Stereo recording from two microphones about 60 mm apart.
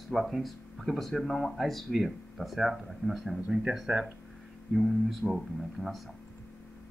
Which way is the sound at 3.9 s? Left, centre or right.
Right.